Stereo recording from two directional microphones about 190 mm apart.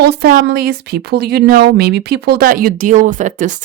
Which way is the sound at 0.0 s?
60° right (ahead or behind).